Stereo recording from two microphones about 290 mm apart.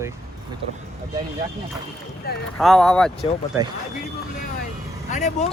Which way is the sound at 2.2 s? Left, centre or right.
Left.